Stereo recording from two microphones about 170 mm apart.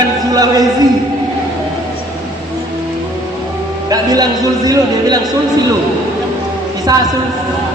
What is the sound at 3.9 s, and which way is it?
A man's voice, 20° right (ahead or behind).